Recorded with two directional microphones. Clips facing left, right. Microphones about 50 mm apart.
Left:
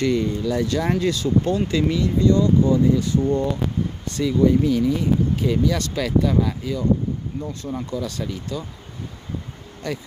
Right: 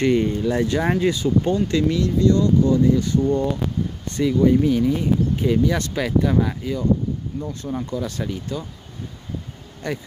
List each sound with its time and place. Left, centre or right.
0.0 s speech: right; by 1.6 s centre
1.7 s speech: centre
2.7 s speech: centre
4.1 s speech: centre
9.8 s speech: centre